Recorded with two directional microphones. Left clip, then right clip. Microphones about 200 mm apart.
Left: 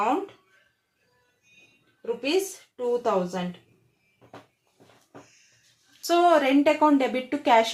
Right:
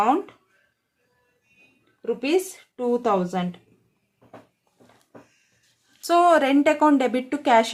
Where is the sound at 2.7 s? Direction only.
50° right (ahead or behind).